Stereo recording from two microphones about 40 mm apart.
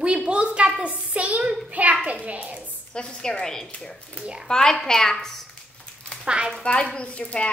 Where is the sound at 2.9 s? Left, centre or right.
Left.